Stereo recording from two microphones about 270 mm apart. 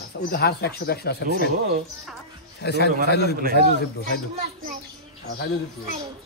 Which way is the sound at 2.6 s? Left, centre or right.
Left.